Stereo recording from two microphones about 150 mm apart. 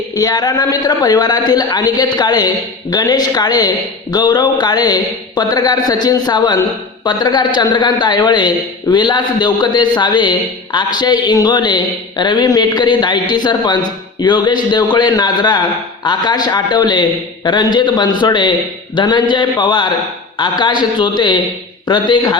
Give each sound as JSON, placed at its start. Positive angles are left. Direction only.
{"t": 0.2, "sound": "a man's voice", "side_deg": 25}